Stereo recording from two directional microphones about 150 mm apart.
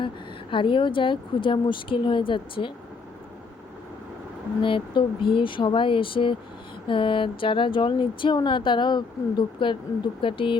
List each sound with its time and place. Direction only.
0.5 s speech: 35° left (ahead or behind)
4.6 s speech: 35° left (ahead or behind)